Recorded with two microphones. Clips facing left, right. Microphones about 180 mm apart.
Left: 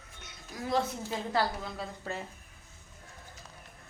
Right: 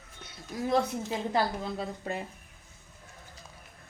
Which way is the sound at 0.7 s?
20° right (ahead or behind).